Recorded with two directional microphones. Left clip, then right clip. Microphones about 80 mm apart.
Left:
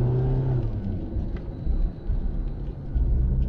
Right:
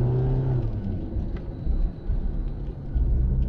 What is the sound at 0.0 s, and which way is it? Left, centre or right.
Vehicle, right.